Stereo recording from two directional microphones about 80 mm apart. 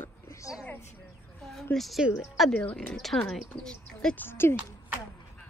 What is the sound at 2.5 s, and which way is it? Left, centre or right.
Speech, centre.